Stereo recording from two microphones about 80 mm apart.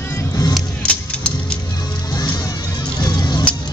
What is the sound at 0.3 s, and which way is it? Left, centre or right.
Music, left.